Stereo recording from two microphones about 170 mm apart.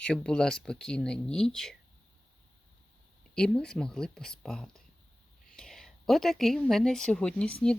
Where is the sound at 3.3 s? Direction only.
5° left (ahead or behind).